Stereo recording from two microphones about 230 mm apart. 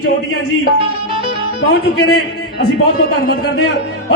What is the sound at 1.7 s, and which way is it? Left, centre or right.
Speech, left.